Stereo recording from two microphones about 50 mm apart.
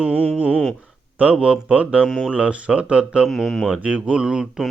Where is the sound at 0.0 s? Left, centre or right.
Right.